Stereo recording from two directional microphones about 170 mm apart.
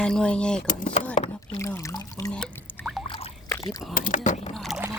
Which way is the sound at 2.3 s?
Centre (ahead or behind).